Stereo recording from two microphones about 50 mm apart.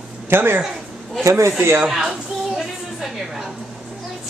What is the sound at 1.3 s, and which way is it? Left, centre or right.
Speech, right.